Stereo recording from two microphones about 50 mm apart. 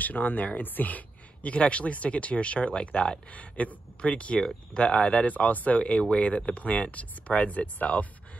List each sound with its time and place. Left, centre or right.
0.0 s speech: left